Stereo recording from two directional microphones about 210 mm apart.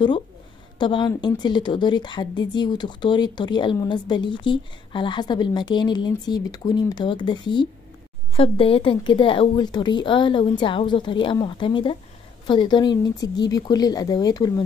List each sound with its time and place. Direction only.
0.7 s a woman's voice: 20° left (ahead or behind)